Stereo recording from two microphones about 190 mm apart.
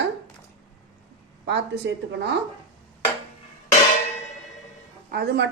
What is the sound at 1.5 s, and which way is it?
Speech, 65° right (ahead or behind).